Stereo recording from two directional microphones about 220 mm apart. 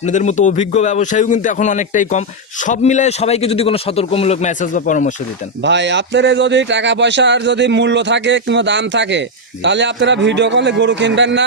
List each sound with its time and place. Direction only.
0.0 s a man's voice: 30° left (ahead or behind)
5.6 s a man's voice: 55° right (ahead or behind)